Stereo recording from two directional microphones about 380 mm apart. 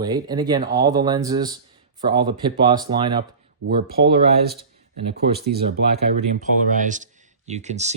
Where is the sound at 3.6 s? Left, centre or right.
Right.